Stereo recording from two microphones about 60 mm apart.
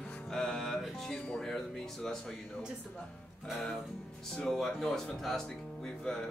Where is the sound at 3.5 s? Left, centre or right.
Centre.